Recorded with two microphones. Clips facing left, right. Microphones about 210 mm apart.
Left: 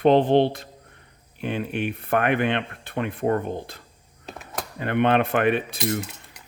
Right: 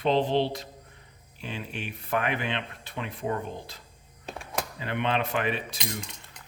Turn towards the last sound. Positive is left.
turn(degrees=5)  # may be behind; listen again after turning